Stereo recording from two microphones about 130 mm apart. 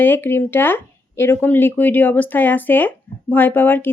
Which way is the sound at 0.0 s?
15° left (ahead or behind).